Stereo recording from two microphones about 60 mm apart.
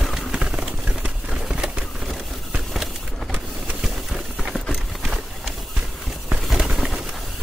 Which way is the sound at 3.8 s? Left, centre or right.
Centre.